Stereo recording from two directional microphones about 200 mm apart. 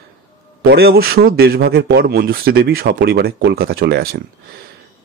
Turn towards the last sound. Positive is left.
turn(degrees=-50)  # may be behind; listen again after turning